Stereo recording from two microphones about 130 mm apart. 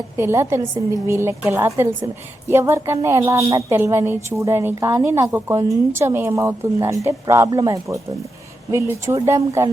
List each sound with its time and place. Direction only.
0.2 s a woman's voice: 20° right (ahead or behind)